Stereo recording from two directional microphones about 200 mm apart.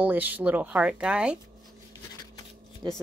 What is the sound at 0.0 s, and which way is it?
Speech, 10° right (ahead or behind).